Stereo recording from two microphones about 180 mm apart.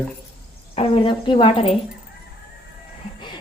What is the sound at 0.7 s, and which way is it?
Speech, 30° left (ahead or behind).